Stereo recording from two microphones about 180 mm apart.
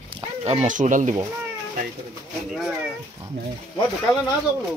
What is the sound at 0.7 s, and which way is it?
Speech, 45° right (ahead or behind).